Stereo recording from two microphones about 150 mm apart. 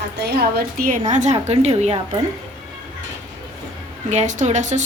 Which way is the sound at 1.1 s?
50° right (ahead or behind).